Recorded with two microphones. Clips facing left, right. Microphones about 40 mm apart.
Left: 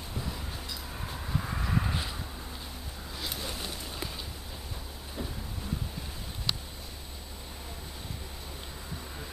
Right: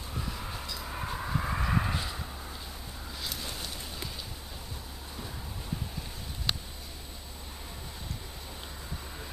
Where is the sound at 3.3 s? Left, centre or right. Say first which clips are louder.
Left 2 dB; centre.